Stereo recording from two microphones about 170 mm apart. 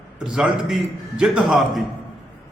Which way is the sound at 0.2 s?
5° right (ahead or behind).